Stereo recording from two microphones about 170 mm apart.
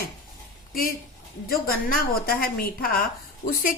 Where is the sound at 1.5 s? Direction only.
60° left (ahead or behind).